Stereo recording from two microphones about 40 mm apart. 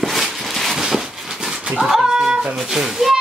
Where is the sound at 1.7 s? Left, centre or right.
Centre.